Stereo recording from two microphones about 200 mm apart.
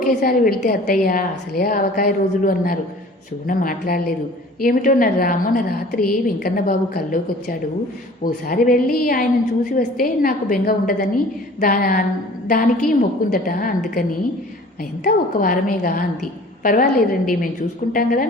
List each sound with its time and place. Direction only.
0.0 s a woman's voice: 45° left (ahead or behind)
15.0 s a woman's voice: 45° left (ahead or behind)